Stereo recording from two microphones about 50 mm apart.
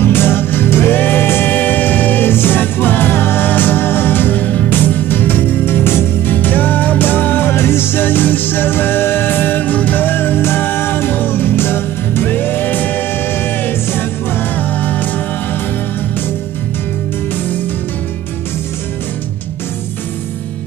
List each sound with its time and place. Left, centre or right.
0.0 s music: left
14.8 s music: left